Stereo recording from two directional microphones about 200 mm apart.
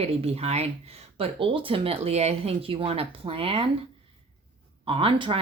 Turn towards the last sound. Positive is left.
turn(degrees=-25)  # may be behind; listen again after turning